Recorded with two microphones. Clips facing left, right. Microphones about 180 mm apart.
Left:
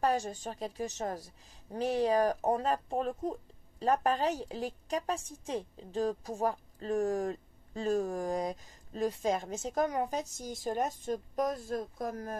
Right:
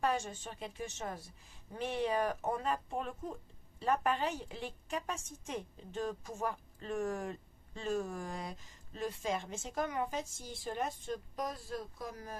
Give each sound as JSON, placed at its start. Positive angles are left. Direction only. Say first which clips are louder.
{"t": 0.0, "sound": "a woman's voice", "louder": "left 4 dB", "side_deg": 35}